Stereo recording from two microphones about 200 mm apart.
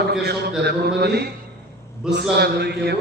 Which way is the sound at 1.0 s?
55° right (ahead or behind).